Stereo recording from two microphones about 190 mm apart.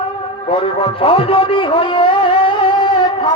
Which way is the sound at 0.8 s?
30° left (ahead or behind).